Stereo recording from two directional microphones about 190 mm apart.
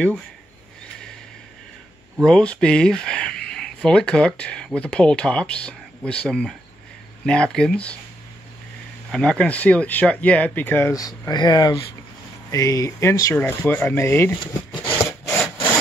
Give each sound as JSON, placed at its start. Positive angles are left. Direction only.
{"t": 2.2, "sound": "speech", "side_deg": 5}
{"t": 9.1, "sound": "speech", "side_deg": 5}
{"t": 14.4, "sound": "speech", "side_deg": 25}
{"t": 14.9, "sound": "wood", "side_deg": 5}